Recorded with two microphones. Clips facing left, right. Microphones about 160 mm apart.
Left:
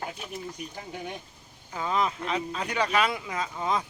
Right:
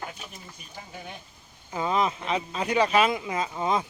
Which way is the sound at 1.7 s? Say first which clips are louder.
Right 2 dB; 20° right (ahead or behind).